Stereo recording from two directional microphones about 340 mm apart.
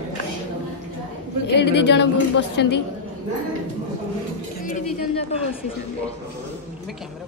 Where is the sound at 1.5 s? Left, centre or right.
Left.